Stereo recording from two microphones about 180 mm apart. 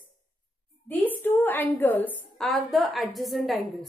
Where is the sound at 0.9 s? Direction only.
10° left (ahead or behind).